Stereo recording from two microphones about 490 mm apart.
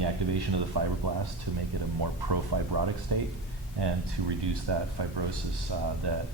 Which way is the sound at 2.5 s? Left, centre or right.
Right.